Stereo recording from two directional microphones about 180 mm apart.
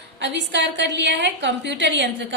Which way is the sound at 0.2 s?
75° right (ahead or behind).